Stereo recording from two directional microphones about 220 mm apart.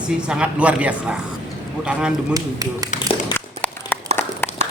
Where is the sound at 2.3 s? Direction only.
15° right (ahead or behind).